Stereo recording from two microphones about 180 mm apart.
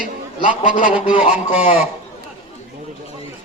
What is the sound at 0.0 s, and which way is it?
Speech, 45° left (ahead or behind).